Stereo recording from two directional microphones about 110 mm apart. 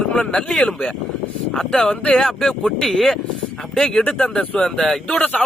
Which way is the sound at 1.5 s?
5° left (ahead or behind).